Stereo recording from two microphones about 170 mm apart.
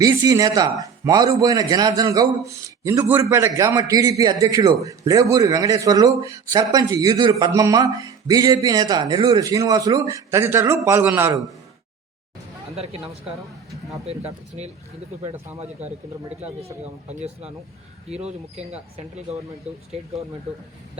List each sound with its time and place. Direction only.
0.0 s a man's voice: 20° right (ahead or behind)
12.7 s speech: 40° right (ahead or behind)
14.1 s speech: 35° right (ahead or behind)
16.4 s speech: 40° right (ahead or behind)